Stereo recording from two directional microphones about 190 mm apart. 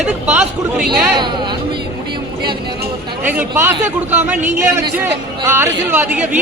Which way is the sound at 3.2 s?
10° right (ahead or behind).